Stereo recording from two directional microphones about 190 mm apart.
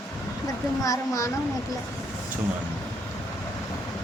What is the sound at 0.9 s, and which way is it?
Speech, 15° left (ahead or behind).